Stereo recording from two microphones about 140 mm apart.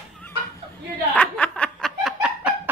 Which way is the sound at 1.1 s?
10° left (ahead or behind).